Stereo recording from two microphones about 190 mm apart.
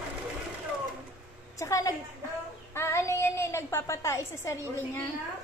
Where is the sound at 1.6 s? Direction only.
15° left (ahead or behind).